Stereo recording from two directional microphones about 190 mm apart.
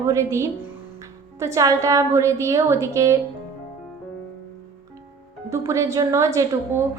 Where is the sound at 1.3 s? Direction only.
15° right (ahead or behind).